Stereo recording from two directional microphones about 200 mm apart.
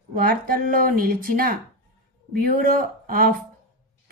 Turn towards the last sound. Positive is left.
turn(degrees=-45)  # may be behind; listen again after turning